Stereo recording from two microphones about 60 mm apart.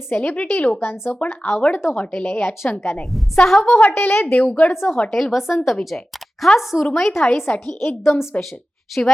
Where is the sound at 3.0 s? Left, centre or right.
Centre.